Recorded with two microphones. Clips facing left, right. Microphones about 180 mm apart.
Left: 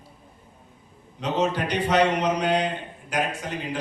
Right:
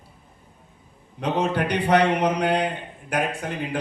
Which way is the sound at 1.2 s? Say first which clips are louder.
Right 1 dB; 60° right (ahead or behind).